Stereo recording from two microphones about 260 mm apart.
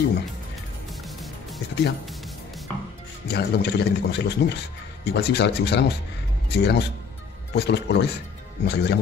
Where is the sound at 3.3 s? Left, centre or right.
Left.